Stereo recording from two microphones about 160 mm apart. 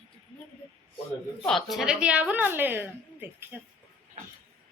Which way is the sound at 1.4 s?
Centre (ahead or behind).